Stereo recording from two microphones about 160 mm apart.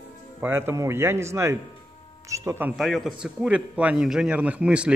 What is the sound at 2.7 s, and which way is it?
A man's voice, centre (ahead or behind).